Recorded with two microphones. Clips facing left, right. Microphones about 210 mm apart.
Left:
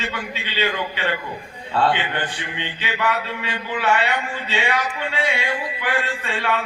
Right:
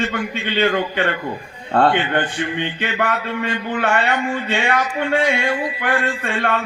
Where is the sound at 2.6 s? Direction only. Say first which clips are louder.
Left 1 dB; 55° right (ahead or behind).